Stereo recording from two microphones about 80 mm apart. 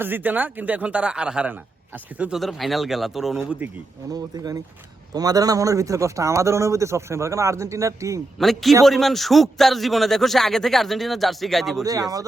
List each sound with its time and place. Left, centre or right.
0.0 s speech: right
2.3 s a man's voice: centre
4.1 s a man's voice: right
8.4 s a man's voice: centre
11.8 s speech: right